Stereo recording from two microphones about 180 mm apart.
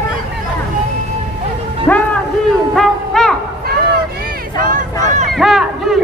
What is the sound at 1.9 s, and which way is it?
Speech, 10° left (ahead or behind).